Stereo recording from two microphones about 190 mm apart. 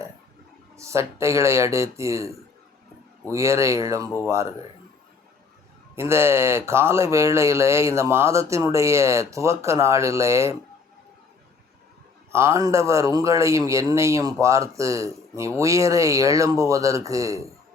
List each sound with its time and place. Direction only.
0.8 s speech: 15° right (ahead or behind)
6.0 s speech: 15° right (ahead or behind)
12.3 s speech: 15° right (ahead or behind)